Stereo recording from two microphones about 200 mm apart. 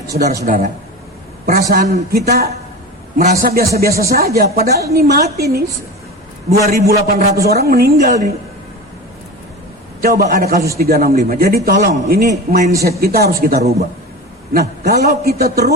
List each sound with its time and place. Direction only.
0.1 s a man's voice: 55° right (ahead or behind)
0.4 s a man's voice: 40° right (ahead or behind)
1.7 s a man's voice: 50° right (ahead or behind)
6.7 s a man's voice: 50° right (ahead or behind)
10.0 s a man's voice: 50° right (ahead or behind)